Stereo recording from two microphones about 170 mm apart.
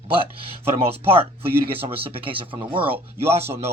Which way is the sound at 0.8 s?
35° right (ahead or behind).